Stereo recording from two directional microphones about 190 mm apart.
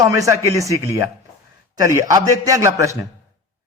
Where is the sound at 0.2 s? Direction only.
15° right (ahead or behind).